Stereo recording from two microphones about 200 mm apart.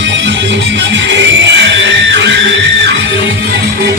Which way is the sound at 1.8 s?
65° right (ahead or behind).